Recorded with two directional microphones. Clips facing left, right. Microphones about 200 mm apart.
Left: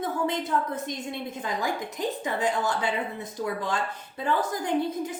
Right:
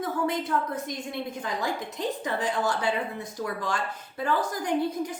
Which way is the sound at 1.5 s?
20° left (ahead or behind).